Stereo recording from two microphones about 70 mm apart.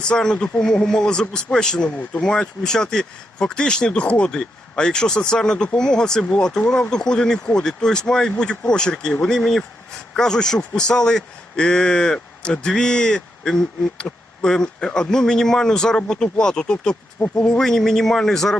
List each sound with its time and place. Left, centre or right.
0.0 s speech: centre
17.6 s a man's voice: centre